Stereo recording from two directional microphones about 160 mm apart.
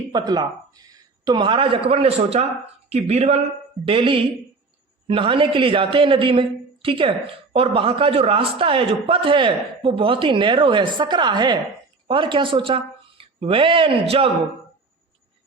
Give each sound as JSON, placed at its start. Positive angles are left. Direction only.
{"t": 0.1, "sound": "a man's voice", "side_deg": -25}